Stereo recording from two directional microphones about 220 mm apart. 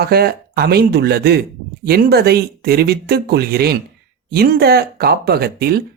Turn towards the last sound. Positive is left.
turn(degrees=-45)  # may be behind; listen again after turning